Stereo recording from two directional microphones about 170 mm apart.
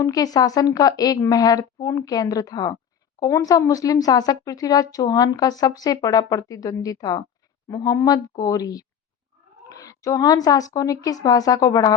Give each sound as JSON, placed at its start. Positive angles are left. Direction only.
{"t": 0.0, "sound": "speech", "side_deg": 20}